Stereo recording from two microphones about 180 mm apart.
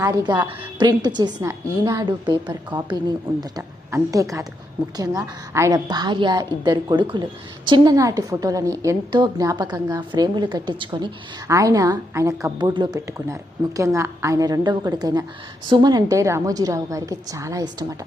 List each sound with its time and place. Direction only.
0.0 s a woman's voice: 20° right (ahead or behind)